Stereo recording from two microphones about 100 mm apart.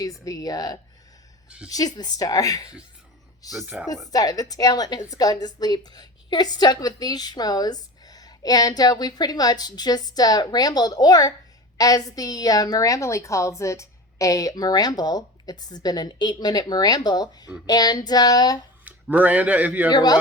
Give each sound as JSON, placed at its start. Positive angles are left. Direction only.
{"t": 0.3, "sound": "a woman's voice", "side_deg": 35}
{"t": 1.5, "sound": "a woman's voice", "side_deg": -10}
{"t": 1.7, "sound": "a woman's voice", "side_deg": 40}
{"t": 18.9, "sound": "speech", "side_deg": -15}
{"t": 19.9, "sound": "speech", "side_deg": 45}